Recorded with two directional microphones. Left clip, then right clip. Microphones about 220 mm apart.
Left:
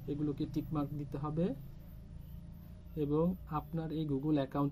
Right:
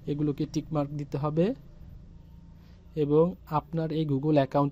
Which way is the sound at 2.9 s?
35° right (ahead or behind).